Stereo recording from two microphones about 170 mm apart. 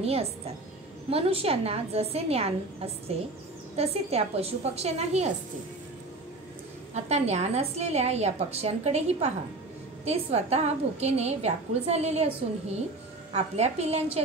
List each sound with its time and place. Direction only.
0.0 s a woman's voice: 35° right (ahead or behind)
6.9 s a woman's voice: 40° right (ahead or behind)